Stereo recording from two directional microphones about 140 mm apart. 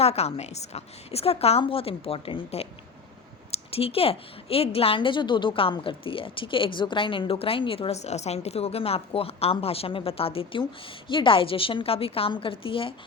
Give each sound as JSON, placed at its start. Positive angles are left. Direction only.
{"t": 0.0, "sound": "a woman's voice", "side_deg": 50}
{"t": 3.7, "sound": "a woman's voice", "side_deg": 45}